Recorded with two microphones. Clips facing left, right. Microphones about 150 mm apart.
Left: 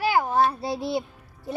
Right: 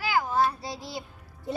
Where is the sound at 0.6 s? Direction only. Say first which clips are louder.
Left 10 dB; 60° left (ahead or behind).